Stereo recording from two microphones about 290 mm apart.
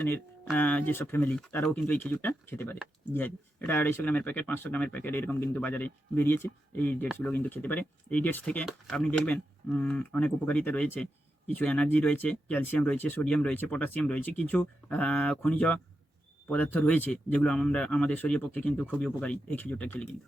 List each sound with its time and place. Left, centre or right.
0.0 s speech: centre